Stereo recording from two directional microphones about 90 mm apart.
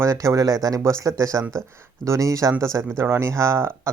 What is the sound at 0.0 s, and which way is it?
Speech, 35° right (ahead or behind).